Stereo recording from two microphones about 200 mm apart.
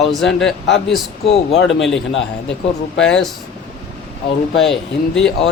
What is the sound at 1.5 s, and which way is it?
A man's voice, 65° left (ahead or behind).